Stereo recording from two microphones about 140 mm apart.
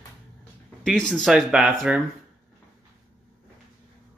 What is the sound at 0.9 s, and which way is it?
Speech, 5° left (ahead or behind).